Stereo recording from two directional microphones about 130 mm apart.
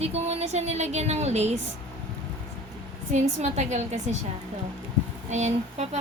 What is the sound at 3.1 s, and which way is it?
Speech, 65° right (ahead or behind).